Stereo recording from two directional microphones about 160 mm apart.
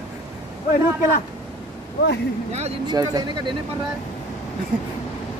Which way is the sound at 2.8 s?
25° right (ahead or behind).